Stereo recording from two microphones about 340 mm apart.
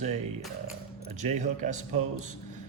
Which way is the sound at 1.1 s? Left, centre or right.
Right.